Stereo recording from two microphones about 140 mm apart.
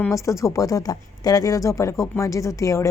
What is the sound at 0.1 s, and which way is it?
Speech, 20° left (ahead or behind).